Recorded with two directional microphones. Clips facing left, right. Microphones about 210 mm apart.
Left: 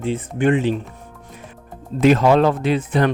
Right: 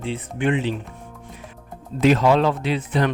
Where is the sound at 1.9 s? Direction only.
50° left (ahead or behind).